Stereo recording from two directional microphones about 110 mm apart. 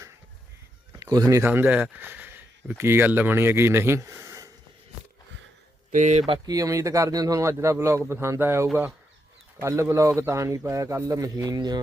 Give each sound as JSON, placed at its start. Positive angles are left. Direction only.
{"t": 0.9, "sound": "a sound", "side_deg": -35}
{"t": 1.5, "sound": "speech", "side_deg": -15}
{"t": 6.1, "sound": "speech", "side_deg": -90}
{"t": 6.4, "sound": "speech", "side_deg": -35}